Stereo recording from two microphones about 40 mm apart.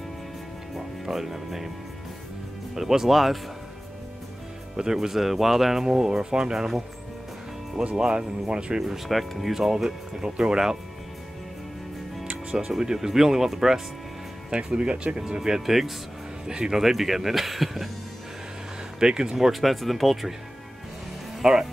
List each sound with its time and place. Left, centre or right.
0.7 s speech: centre
2.7 s speech: centre
4.7 s speech: centre
7.9 s speech: centre
8.7 s speech: centre
12.3 s speech: centre
14.8 s speech: right
15.1 s speech: centre
16.4 s speech: centre
16.8 s speech: centre
18.9 s speech: centre
19.3 s speech: centre
21.4 s speech: centre